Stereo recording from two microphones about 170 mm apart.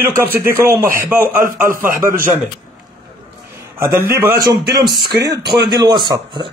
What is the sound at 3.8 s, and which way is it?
Speech, 15° right (ahead or behind).